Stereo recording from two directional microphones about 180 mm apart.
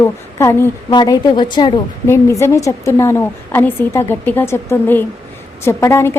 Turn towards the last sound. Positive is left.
turn(degrees=15)  # may be behind; listen again after turning